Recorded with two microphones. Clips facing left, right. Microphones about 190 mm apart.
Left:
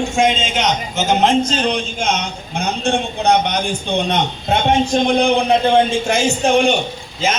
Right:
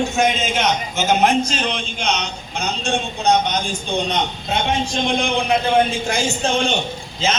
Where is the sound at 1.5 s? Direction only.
35° left (ahead or behind).